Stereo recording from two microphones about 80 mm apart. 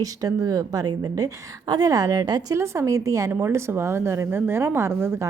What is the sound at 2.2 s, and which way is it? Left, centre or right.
Speech, right.